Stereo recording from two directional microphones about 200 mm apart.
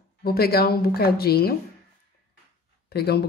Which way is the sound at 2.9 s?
55° left (ahead or behind).